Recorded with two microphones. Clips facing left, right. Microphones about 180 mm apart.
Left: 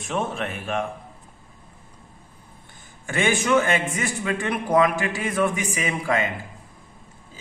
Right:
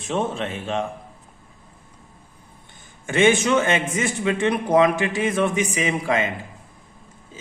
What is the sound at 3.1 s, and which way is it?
A man's voice, 20° right (ahead or behind).